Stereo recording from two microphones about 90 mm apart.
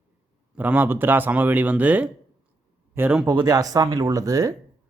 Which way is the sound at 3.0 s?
30° right (ahead or behind).